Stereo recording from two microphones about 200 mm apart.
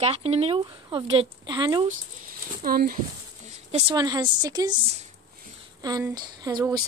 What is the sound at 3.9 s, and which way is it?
Speech, 20° right (ahead or behind).